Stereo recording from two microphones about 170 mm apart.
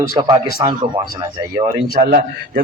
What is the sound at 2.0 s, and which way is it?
Speech, 65° right (ahead or behind).